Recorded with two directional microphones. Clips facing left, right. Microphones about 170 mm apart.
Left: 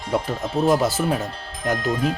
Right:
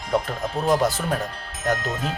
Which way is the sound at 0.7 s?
5° left (ahead or behind).